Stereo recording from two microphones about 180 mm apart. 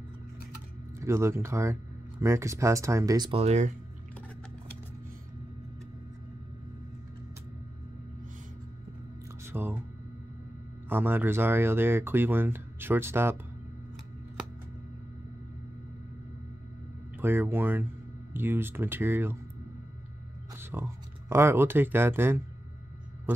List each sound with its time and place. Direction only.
0.9 s speech: 15° right (ahead or behind); by 3.7 s 35° right (ahead or behind)
9.4 s music: 10° right (ahead or behind)
10.9 s speech: 10° right (ahead or behind)
17.2 s speech: 10° right (ahead or behind)
20.5 s speech: 15° right (ahead or behind)